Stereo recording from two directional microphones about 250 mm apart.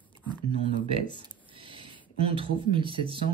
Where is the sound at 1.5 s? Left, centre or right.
Centre.